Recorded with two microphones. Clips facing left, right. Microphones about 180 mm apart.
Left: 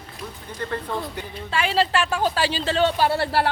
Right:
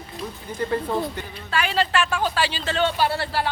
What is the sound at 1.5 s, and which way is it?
Speech, 25° left (ahead or behind).